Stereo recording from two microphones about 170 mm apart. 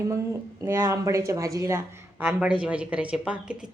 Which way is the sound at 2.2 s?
5° right (ahead or behind).